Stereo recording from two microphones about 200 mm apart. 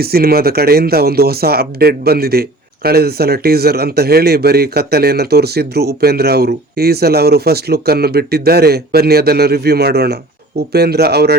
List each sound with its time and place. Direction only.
0.0 s speech: 50° right (ahead or behind)